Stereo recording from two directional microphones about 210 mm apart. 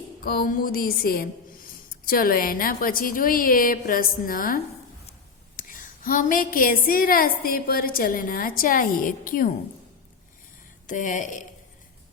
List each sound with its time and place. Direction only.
0.3 s a woman's voice: 40° left (ahead or behind)
10.8 s a woman's voice: 40° left (ahead or behind)